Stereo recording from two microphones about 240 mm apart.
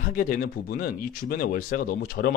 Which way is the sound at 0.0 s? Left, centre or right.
Left.